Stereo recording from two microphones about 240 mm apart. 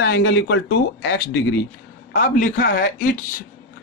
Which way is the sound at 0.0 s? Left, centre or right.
Left.